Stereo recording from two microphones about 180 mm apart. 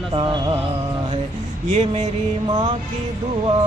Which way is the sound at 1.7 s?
35° right (ahead or behind).